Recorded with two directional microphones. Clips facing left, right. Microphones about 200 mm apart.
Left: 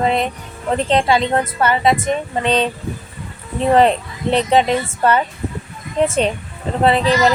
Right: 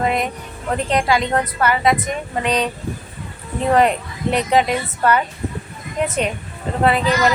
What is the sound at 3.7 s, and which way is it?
A woman's voice, 30° left (ahead or behind).